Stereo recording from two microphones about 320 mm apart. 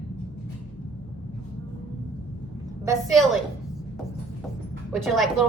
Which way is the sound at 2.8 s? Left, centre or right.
Centre.